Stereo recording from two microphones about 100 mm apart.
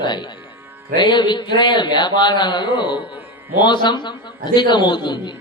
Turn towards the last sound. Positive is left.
turn(degrees=50)  # may be behind; listen again after turning